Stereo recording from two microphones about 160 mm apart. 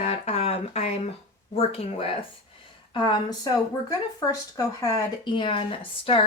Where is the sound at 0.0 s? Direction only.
40° left (ahead or behind).